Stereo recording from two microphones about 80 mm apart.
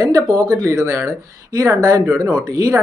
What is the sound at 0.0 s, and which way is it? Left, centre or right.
Speech, right.